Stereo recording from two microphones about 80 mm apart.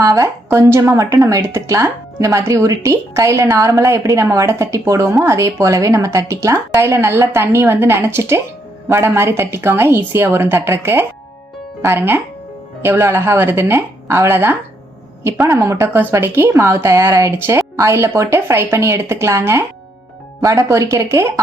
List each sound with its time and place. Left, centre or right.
0.0 s a woman's voice: right
14.3 s speech: right
15.2 s speech: right